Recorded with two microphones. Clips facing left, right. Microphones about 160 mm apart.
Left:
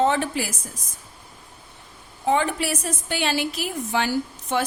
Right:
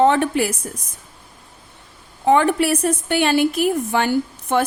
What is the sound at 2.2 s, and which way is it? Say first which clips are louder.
A woman's voice: right 7 dB; 60° right (ahead or behind).